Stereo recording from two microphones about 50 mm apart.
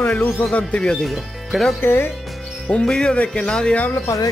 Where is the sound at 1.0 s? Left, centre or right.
Centre.